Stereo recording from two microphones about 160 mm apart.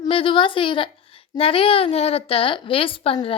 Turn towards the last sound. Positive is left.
turn(degrees=35)  # may be behind; listen again after turning